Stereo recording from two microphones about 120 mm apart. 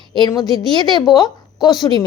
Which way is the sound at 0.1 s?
40° left (ahead or behind).